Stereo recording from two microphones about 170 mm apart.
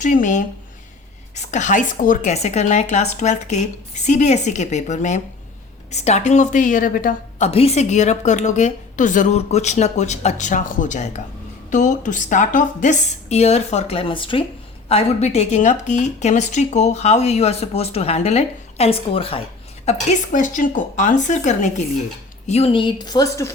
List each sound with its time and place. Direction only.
0.0 s a woman's voice: 50° left (ahead or behind); by 23.6 s 15° left (ahead or behind)